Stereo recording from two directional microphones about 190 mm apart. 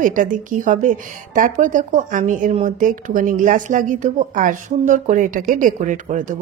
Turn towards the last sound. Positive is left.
turn(degrees=-40)  # may be behind; listen again after turning